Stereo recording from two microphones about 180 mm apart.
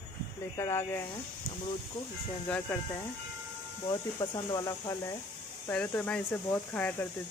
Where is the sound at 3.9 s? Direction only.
20° left (ahead or behind).